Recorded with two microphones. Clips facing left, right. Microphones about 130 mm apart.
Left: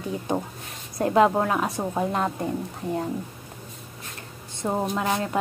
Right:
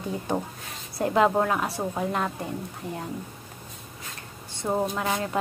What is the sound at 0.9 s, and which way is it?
A woman's voice, 20° left (ahead or behind).